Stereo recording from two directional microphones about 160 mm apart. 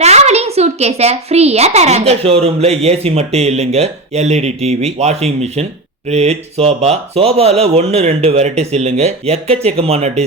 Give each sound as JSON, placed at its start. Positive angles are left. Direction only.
{"t": 0.0, "sound": "a child's voice", "side_deg": -45}